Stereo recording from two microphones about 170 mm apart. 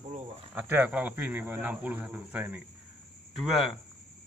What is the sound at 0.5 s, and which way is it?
Speech, 10° right (ahead or behind).